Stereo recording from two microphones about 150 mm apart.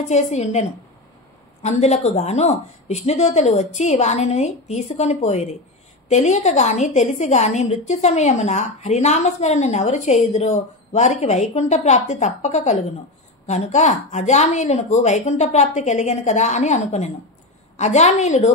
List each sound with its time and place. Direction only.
0.1 s a woman's voice: 50° left (ahead or behind)